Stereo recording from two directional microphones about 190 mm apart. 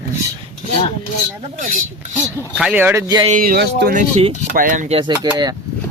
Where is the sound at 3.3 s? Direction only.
50° right (ahead or behind).